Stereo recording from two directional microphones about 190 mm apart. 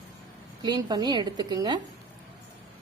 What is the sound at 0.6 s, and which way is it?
A woman's voice, 20° right (ahead or behind).